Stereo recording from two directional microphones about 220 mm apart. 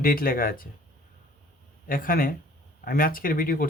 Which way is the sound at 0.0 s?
40° left (ahead or behind).